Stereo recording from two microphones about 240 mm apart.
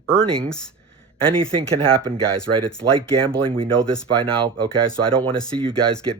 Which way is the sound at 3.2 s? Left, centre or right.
Right.